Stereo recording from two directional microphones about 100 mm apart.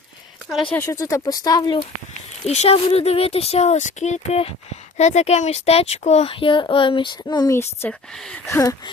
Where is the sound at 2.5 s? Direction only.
90° left; by 7.5 s 45° left (ahead or behind).